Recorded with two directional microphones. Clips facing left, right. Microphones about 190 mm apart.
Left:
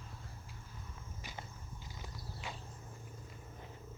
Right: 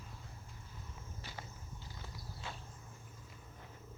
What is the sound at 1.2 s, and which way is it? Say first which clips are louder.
Walk: left 2 dB; 15° left (ahead or behind).